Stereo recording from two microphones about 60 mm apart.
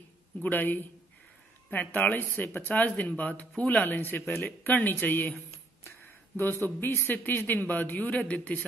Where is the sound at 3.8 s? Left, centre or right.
Left.